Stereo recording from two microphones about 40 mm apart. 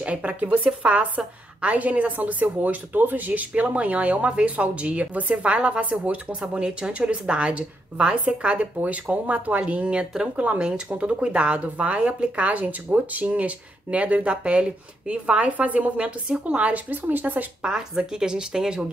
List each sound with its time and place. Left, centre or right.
0.0 s speech: right
6.4 s speech: right
10.3 s speech: right
16.9 s a woman's voice: right
17.6 s speech: centre